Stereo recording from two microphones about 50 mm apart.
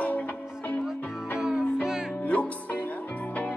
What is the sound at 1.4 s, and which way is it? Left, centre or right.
Music, centre.